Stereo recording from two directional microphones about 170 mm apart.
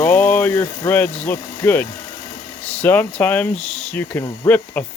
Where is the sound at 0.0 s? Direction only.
10° left (ahead or behind).